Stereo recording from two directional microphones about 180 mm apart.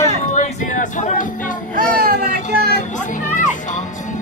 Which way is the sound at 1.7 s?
55° right (ahead or behind).